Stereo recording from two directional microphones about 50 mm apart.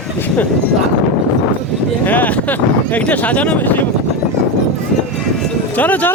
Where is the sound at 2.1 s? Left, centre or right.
Left.